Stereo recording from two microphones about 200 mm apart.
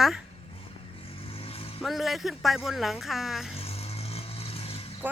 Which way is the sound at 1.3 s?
30° left (ahead or behind).